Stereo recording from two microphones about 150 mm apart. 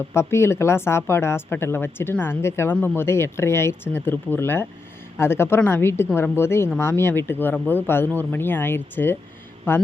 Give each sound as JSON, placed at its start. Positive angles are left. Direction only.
{"t": 0.1, "sound": "speech", "side_deg": 20}